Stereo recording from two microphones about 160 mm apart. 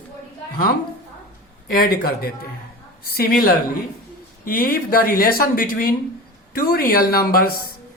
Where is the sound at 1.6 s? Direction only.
65° left (ahead or behind).